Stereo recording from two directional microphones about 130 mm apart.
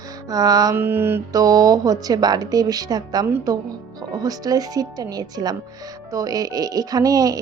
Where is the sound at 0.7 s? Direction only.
15° right (ahead or behind).